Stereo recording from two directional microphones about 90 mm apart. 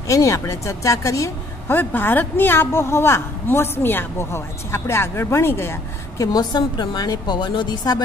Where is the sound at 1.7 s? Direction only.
25° left (ahead or behind).